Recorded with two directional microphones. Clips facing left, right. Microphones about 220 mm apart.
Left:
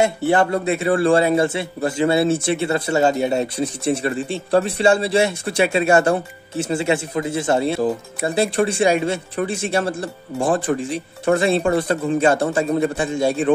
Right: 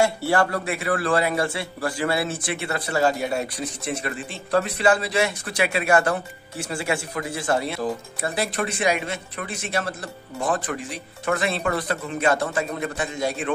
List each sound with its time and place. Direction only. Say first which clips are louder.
0.0 s a man's voice: left 4 dB; 20° left (ahead or behind)